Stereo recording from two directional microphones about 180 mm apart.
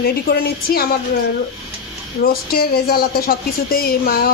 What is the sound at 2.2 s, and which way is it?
Speech, 55° left (ahead or behind).